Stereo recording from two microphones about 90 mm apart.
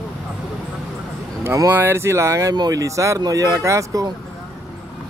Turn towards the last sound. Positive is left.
turn(degrees=-35)  # may be behind; listen again after turning